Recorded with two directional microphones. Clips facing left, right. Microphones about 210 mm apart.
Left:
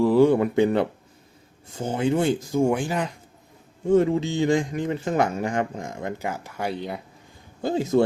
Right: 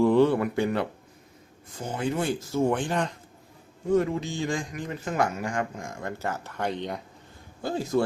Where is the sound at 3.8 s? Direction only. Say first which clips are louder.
Left 5 dB; 25° left (ahead or behind); by 7.0 s 5° left (ahead or behind).